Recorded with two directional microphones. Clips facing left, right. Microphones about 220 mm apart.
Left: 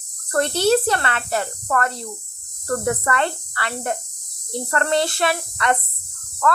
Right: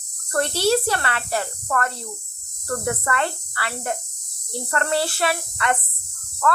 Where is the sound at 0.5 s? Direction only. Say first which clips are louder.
Left 3 dB; 10° right (ahead or behind).